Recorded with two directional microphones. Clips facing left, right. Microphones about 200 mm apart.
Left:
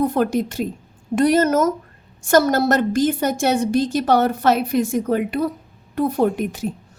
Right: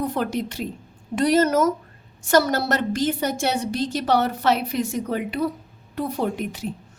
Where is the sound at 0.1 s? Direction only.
45° left (ahead or behind).